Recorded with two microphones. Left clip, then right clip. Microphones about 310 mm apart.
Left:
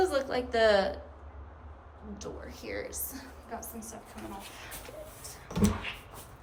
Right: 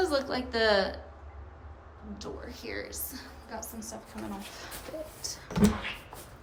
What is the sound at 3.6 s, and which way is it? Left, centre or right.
Speech, centre.